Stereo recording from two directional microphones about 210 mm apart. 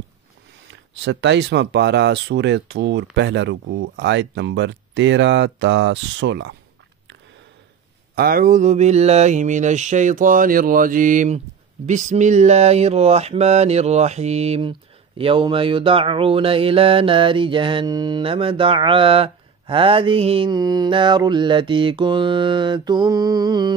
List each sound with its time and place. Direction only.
1.0 s speech: 55° right (ahead or behind)
8.1 s mantra: 45° right (ahead or behind); by 23.7 s 20° right (ahead or behind)